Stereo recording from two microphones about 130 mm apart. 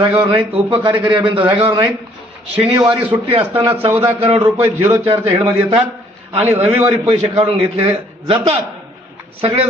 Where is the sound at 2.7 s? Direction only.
35° right (ahead or behind).